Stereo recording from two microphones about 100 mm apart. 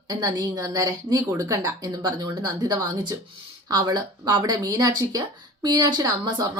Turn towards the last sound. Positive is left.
turn(degrees=-40)  # may be behind; listen again after turning